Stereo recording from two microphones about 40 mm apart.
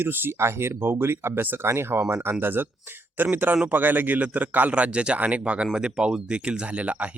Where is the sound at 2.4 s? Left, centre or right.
Right.